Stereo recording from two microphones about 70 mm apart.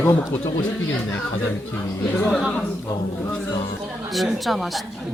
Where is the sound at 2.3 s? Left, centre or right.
Centre.